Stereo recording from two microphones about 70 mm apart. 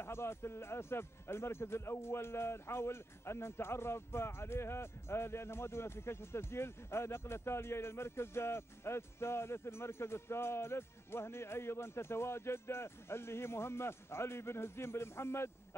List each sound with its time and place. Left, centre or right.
0.0 s speech: left